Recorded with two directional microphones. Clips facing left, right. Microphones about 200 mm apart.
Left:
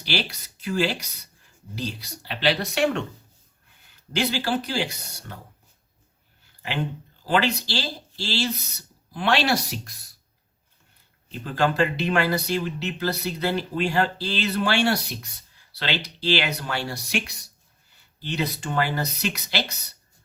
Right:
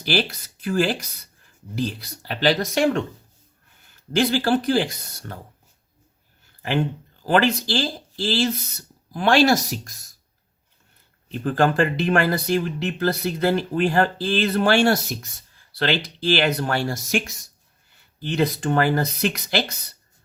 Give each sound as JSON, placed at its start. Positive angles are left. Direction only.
{"t": 0.0, "sound": "speech", "side_deg": -50}
{"t": 4.1, "sound": "speech", "side_deg": -50}
{"t": 7.3, "sound": "speech", "side_deg": -50}
{"t": 11.3, "sound": "speech", "side_deg": -50}